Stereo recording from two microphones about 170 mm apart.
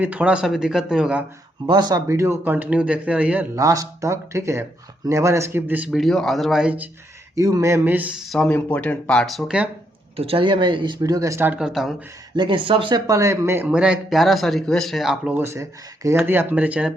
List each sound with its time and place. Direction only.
0.0 s speech: 10° right (ahead or behind)
1.6 s speech: 25° right (ahead or behind); by 3.4 s 5° right (ahead or behind)
3.5 s speech: 20° right (ahead or behind)
7.3 s speech: 20° right (ahead or behind); by 9.6 s 5° right (ahead or behind)
10.2 s speech: 35° right (ahead or behind); by 11.9 s centre (ahead or behind)
12.4 s speech: 30° right (ahead or behind); by 16.9 s 10° right (ahead or behind)